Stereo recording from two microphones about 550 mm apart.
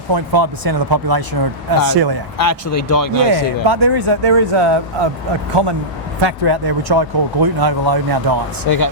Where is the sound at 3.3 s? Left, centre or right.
Right.